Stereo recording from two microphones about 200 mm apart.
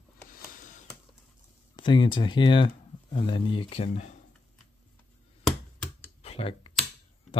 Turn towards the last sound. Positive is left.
turn(degrees=30)  # may be behind; listen again after turning